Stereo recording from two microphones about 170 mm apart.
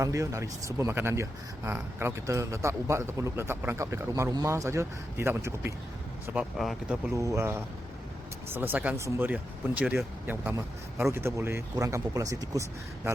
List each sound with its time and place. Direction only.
0.0 s speech: 20° right (ahead or behind)
6.3 s speech: 5° right (ahead or behind)
7.1 s speech: 15° right (ahead or behind)